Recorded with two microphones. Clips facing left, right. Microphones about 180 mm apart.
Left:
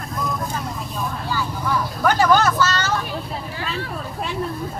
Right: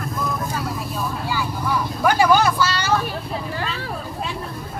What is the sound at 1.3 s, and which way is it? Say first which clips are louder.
Vehicle: left 1 dB; 10° right (ahead or behind).